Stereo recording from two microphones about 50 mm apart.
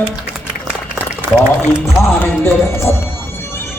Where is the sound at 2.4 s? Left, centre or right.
Left.